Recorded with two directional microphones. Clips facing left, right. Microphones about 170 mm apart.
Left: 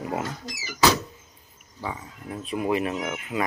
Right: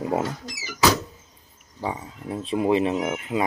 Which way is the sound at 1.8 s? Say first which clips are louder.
Right 4 dB; 30° right (ahead or behind).